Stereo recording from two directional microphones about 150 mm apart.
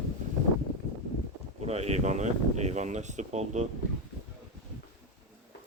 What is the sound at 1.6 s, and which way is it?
Speech, 45° right (ahead or behind).